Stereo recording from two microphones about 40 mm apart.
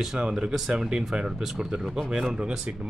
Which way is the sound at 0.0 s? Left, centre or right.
Centre.